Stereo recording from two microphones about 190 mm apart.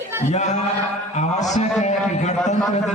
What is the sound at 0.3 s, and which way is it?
A man's voice, 40° left (ahead or behind).